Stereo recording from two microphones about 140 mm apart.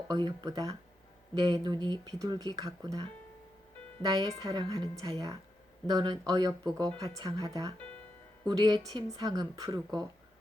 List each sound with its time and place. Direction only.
0.1 s speech: 30° right (ahead or behind)